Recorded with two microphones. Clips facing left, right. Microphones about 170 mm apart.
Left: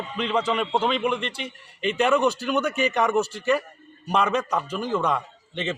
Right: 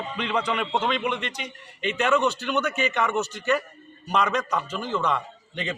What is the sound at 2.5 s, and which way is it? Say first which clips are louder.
Speech: left 2 dB; 35° left (ahead or behind).